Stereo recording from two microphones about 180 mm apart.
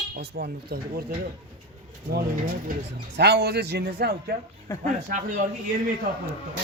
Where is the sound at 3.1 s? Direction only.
65° right (ahead or behind).